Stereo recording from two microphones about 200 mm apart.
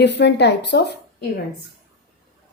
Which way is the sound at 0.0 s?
60° left (ahead or behind).